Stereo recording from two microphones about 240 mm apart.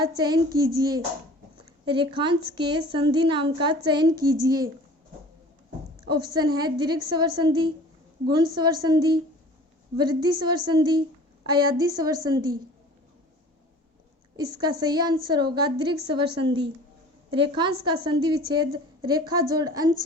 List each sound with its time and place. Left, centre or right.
0.0 s a woman's voice: centre
1.5 s a sound: centre
2.6 s a woman's voice: centre
6.1 s a woman's voice: centre
14.3 s a woman's voice: centre